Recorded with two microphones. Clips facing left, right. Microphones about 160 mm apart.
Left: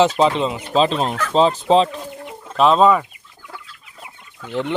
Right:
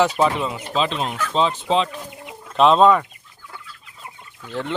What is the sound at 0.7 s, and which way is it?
Speech, 35° left (ahead or behind).